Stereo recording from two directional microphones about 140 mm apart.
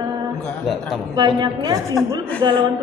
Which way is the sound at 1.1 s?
30° right (ahead or behind).